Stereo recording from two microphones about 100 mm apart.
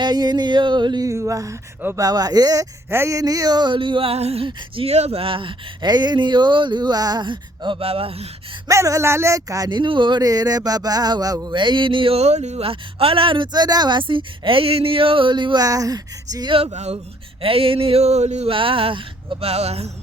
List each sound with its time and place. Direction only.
0.0 s speech: 45° right (ahead or behind)
1.0 s speech: 30° right (ahead or behind); by 4.4 s 90° right
4.4 s speech: 80° right
8.6 s speech: 30° right (ahead or behind)
9.6 s speech: 55° right (ahead or behind)
11.4 s speech: 50° right (ahead or behind)
15.6 s speech: 35° right (ahead or behind)
16.5 s speech: 70° right (ahead or behind)
19.4 s speech: 90° right